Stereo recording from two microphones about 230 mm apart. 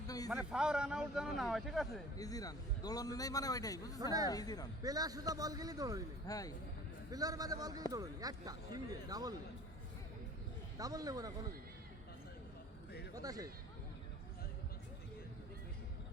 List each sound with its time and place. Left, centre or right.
0.3 s a man's voice: centre
2.1 s a man's voice: centre
4.0 s speech: centre
4.3 s a man's voice: centre
4.8 s speech: centre
6.2 s a man's voice: centre
7.1 s speech: centre
10.8 s speech: centre
13.1 s speech: centre